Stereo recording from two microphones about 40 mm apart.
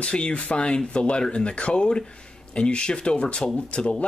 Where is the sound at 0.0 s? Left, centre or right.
Left.